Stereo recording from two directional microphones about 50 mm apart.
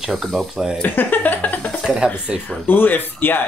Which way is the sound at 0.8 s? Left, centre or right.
Left.